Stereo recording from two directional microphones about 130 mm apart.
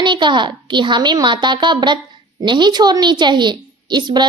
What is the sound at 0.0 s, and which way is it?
A woman's voice, 35° right (ahead or behind).